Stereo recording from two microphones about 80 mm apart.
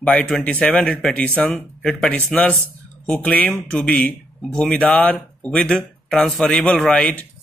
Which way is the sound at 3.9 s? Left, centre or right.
Centre.